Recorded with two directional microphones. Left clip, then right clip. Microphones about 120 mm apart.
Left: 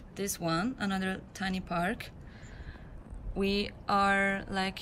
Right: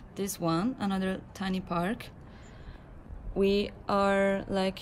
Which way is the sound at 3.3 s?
25° right (ahead or behind).